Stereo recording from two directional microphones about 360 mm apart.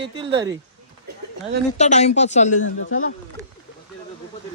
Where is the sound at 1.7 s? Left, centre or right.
Centre.